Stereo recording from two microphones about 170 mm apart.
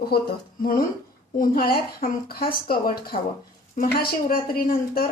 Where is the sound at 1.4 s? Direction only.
60° left (ahead or behind).